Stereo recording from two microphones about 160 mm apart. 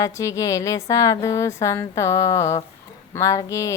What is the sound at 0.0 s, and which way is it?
A woman's voice, 20° left (ahead or behind).